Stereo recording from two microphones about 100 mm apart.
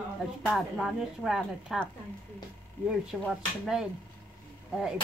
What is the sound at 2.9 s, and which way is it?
Speech, 5° right (ahead or behind).